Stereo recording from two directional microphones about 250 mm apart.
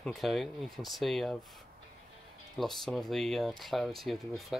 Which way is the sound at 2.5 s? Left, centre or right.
Centre.